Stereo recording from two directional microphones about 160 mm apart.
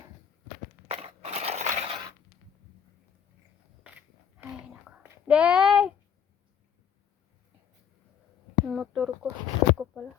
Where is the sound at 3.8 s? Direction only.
10° right (ahead or behind).